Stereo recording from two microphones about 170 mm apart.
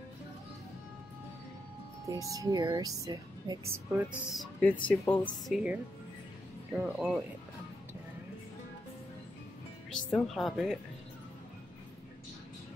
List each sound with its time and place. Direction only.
2.0 s speech: 20° right (ahead or behind)
4.3 s speech: 5° left (ahead or behind)
5.5 s speech: 5° right (ahead or behind)
10.1 s speech: centre (ahead or behind)